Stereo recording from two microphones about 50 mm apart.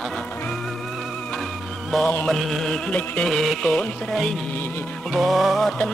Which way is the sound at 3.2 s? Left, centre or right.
Centre.